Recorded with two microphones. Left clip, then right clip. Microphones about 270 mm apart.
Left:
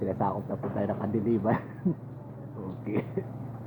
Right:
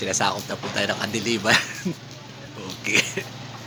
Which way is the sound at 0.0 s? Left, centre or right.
Centre.